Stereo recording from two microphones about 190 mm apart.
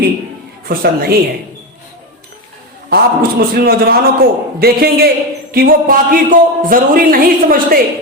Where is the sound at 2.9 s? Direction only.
55° right (ahead or behind).